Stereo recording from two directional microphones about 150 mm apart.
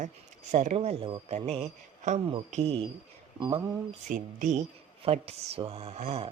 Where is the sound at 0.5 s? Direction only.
50° right (ahead or behind).